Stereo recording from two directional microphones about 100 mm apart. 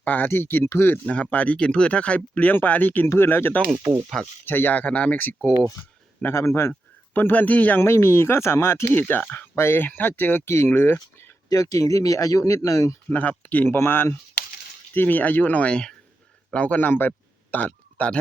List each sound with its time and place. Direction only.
0.0 s speech: 15° left (ahead or behind)
1.0 s speech: 10° left (ahead or behind)
4.1 s speech: 5° left (ahead or behind)
4.4 s speech: 20° left (ahead or behind)
11.4 s speech: 35° left (ahead or behind)
13.1 s a man's voice: 15° left (ahead or behind)